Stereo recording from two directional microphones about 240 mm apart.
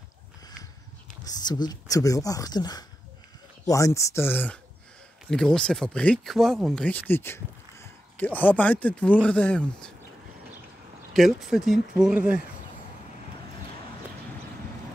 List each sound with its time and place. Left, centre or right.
1.2 s speech: centre
11.1 s speech: centre